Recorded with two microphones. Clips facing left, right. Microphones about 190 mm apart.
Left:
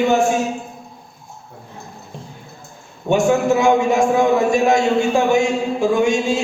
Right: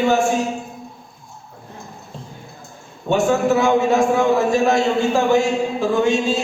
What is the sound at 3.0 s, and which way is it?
A man's voice, 15° left (ahead or behind).